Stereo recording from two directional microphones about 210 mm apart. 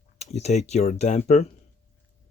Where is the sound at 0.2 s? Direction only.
30° left (ahead or behind).